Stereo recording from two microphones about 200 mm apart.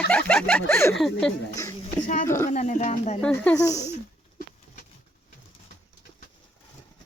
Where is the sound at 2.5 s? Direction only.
35° left (ahead or behind).